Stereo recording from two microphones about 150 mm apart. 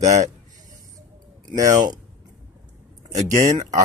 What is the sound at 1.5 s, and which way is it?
Speech, 25° right (ahead or behind).